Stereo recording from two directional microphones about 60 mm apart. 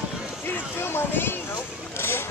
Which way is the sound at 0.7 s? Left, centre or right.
Left.